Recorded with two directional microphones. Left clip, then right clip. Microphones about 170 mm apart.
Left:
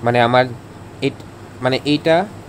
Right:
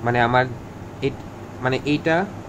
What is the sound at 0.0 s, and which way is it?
Speech, 40° left (ahead or behind).